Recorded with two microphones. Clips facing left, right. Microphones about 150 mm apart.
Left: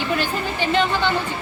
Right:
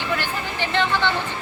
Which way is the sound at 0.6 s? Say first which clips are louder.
Left 2 dB; 15° left (ahead or behind).